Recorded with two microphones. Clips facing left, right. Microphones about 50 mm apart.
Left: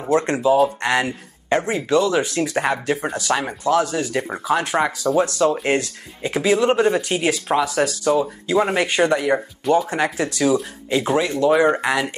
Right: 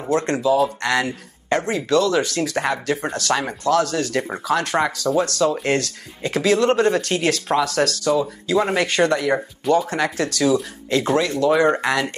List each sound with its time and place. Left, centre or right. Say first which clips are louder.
0.1 s speech: left 2 dB; centre